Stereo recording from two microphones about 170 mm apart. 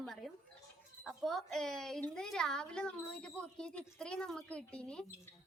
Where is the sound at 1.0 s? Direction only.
Centre (ahead or behind).